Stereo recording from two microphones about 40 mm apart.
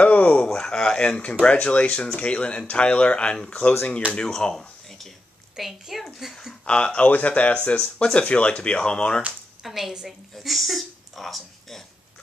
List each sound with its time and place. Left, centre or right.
0.0 s a sound: left
0.6 s a sound: centre
1.0 s speech: left
4.3 s speech: centre
5.6 s a woman's voice: centre
6.6 s speech: left
7.1 s speech: left
7.8 s speech: centre
8.2 s speech: left
9.6 s a woman's voice: centre